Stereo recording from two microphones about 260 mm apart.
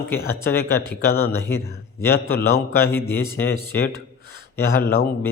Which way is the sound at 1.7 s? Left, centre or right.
Left.